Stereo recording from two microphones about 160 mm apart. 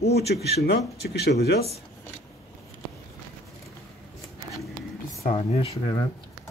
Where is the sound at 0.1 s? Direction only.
90° left.